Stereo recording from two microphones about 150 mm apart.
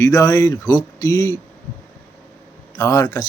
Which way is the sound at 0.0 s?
20° left (ahead or behind).